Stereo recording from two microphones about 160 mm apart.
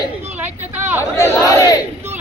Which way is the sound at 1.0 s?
15° left (ahead or behind).